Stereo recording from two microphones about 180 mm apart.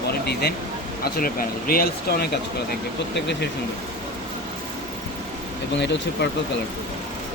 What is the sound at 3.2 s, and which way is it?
Speech, 70° left (ahead or behind).